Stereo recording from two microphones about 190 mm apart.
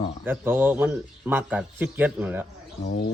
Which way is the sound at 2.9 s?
65° left (ahead or behind).